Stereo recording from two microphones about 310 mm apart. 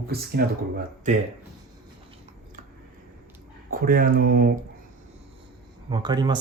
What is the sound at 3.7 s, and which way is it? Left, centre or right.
Speech, right.